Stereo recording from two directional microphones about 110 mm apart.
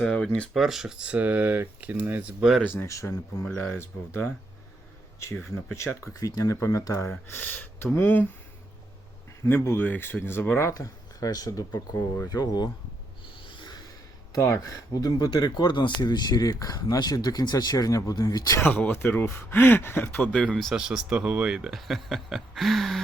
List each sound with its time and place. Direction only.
0.0 s speech: 5° left (ahead or behind); by 2.3 s 15° right (ahead or behind)
2.4 s speech: 5° right (ahead or behind)
2.6 s speech: 25° left (ahead or behind)
3.4 s speech: 15° left (ahead or behind)
9.5 s speech: 25° left (ahead or behind)
13.4 s a sound: 45° left (ahead or behind)
14.3 s speech: 30° left (ahead or behind)
18.6 s speech: 20° left (ahead or behind)
20.3 s speech: 10° left (ahead or behind)
20.7 s speech: 5° right (ahead or behind)